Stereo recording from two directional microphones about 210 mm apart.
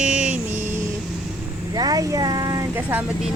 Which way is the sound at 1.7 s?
20° right (ahead or behind).